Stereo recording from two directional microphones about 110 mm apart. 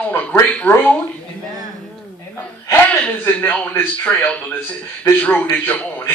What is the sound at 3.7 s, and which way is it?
Speech, 15° left (ahead or behind).